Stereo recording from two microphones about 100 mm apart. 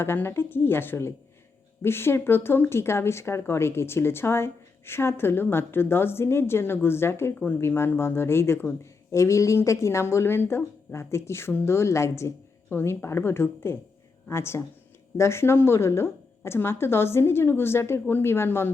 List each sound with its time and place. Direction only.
0.0 s speech: 25° left (ahead or behind)